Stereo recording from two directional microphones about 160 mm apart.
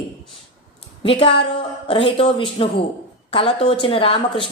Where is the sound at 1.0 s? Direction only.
35° left (ahead or behind).